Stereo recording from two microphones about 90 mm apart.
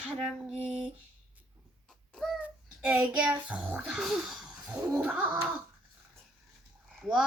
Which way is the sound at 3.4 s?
15° right (ahead or behind).